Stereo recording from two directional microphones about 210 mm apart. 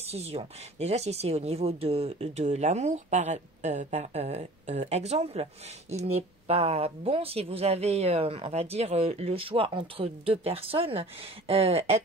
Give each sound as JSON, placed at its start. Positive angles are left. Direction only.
{"t": 0.0, "sound": "speech", "side_deg": -30}